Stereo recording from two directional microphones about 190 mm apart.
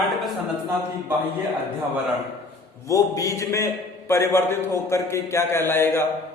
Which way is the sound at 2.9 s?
15° left (ahead or behind).